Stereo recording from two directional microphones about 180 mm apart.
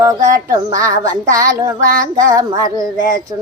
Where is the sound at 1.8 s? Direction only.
50° right (ahead or behind).